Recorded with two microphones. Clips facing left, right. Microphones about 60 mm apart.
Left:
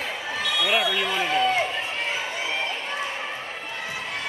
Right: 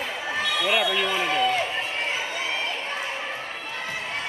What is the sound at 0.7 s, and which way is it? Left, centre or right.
Speech, centre.